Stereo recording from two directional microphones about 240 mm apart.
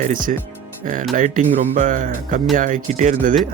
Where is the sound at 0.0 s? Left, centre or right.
Right.